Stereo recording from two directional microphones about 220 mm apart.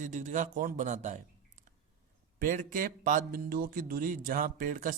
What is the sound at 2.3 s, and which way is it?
Speech, 35° right (ahead or behind).